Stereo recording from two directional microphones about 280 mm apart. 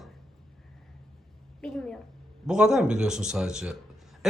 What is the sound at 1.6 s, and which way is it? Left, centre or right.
A child's voice, centre.